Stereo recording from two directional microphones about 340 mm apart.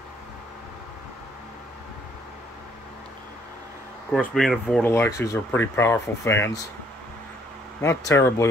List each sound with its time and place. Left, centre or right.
4.1 s speech: centre
7.8 s speech: centre